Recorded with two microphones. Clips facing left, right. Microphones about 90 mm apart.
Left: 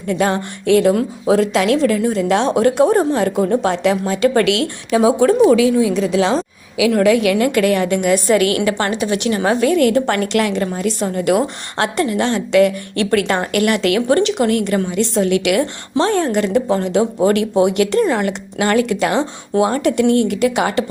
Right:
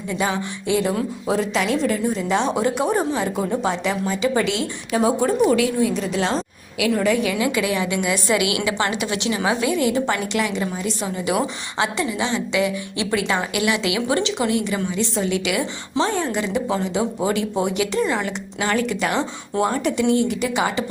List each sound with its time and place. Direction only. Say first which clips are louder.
0.1 s a woman's voice: left 6 dB; 65° left (ahead or behind)
3.6 s a woman's voice: left 6 dB; 75° left (ahead or behind)